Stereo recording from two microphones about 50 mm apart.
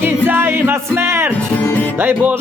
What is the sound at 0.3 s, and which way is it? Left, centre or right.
Music, right.